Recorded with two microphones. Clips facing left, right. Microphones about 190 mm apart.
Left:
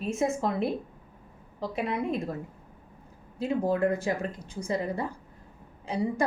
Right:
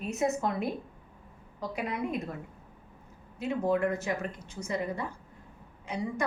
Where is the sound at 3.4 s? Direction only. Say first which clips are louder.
Left 2 dB; 30° left (ahead or behind).